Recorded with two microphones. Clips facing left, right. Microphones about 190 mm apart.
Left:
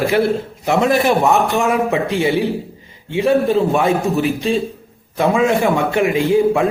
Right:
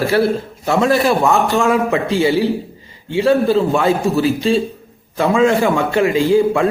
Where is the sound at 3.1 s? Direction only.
20° left (ahead or behind).